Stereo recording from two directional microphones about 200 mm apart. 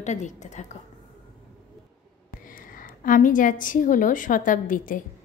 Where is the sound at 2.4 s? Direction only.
45° left (ahead or behind).